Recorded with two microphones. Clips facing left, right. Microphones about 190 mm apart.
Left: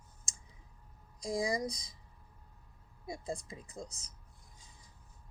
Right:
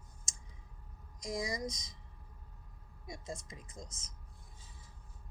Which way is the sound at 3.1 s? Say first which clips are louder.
Left 5 dB; 30° left (ahead or behind).